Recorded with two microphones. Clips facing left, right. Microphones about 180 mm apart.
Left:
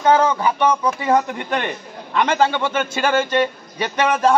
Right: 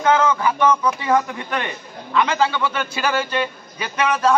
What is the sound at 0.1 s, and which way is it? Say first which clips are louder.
Speech: left 1 dB; 35° left (ahead or behind).